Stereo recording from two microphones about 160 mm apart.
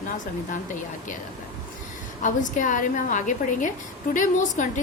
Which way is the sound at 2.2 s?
55° left (ahead or behind).